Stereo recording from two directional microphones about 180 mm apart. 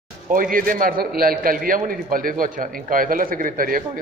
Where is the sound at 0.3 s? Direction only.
50° right (ahead or behind).